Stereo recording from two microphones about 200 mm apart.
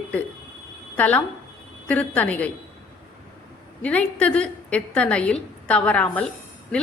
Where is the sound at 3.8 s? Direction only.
5° left (ahead or behind).